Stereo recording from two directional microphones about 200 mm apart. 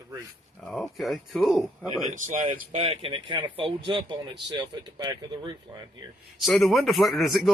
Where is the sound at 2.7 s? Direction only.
30° right (ahead or behind).